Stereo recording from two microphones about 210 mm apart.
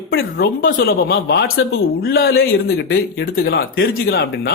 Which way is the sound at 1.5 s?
75° left (ahead or behind).